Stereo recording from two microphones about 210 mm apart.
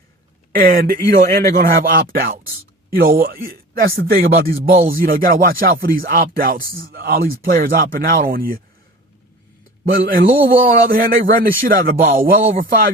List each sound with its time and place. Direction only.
0.5 s speech: 45° right (ahead or behind)
9.9 s speech: 45° right (ahead or behind)